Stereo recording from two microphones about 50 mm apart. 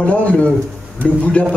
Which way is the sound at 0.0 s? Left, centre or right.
Left.